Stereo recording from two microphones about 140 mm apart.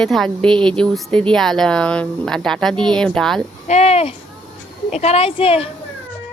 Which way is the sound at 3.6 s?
50° left (ahead or behind).